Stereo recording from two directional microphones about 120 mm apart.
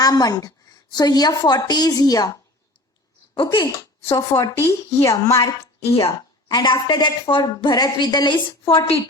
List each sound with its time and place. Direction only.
0.0 s a woman's voice: 30° left (ahead or behind)
3.3 s speech: 45° left (ahead or behind)
4.1 s speech: 25° left (ahead or behind)
5.8 s speech: 55° left (ahead or behind)
6.5 s a woman's voice: 40° left (ahead or behind)